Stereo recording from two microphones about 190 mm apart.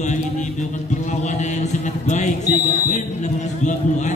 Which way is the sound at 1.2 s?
40° left (ahead or behind).